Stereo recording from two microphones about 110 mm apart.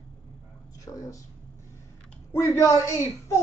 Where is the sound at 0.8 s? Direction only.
30° left (ahead or behind).